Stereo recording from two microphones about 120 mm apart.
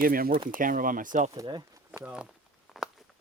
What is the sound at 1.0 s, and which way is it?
Speech, 90° right.